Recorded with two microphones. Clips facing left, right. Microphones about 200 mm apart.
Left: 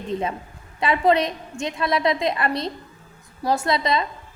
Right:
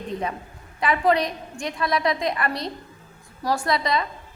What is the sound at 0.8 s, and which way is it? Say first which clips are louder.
A woman's voice: left 2 dB; 25° left (ahead or behind).